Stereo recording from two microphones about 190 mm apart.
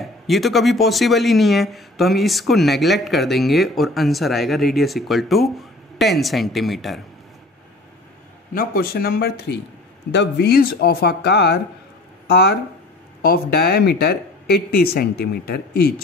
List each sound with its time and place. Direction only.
0.0 s speech: centre (ahead or behind)
8.5 s speech: 50° left (ahead or behind)